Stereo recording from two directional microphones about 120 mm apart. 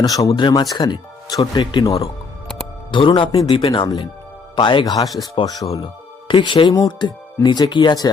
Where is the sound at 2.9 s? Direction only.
45° left (ahead or behind).